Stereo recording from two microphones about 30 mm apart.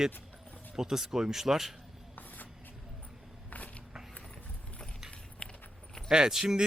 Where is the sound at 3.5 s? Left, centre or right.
Left.